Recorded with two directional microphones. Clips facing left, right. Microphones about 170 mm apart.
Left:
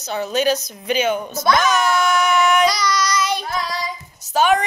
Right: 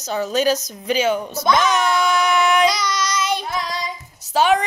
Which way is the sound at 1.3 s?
15° right (ahead or behind).